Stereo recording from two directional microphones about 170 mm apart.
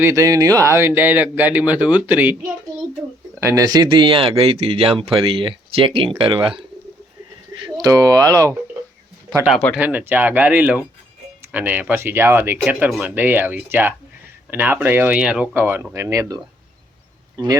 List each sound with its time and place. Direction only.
0.0 s speech: 15° right (ahead or behind)
3.4 s speech: 20° right (ahead or behind)
7.6 s speech: 20° right (ahead or behind)
9.5 s speech: 5° left (ahead or behind)
9.7 s speech: 10° right (ahead or behind)